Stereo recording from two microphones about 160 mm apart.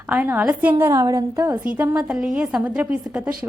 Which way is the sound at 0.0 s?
10° right (ahead or behind).